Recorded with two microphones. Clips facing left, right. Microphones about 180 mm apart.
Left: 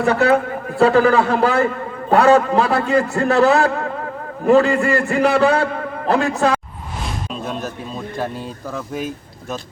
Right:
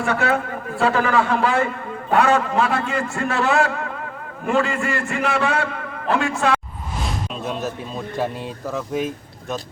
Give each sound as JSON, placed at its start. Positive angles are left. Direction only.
{"t": 0.0, "sound": "a man's voice", "side_deg": 35}
{"t": 7.3, "sound": "a man's voice", "side_deg": 0}